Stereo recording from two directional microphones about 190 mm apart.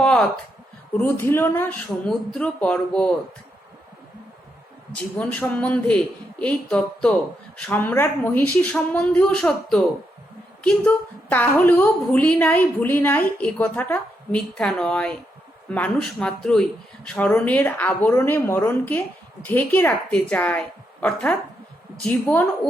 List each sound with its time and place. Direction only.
0.9 s a woman's voice: 10° left (ahead or behind)
4.9 s a woman's voice: 5° left (ahead or behind)